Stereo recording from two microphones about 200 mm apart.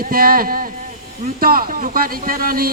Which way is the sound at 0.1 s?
45° right (ahead or behind).